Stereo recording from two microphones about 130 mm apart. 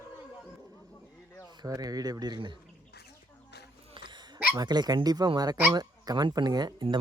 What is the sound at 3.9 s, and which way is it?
Hiccup, 40° right (ahead or behind).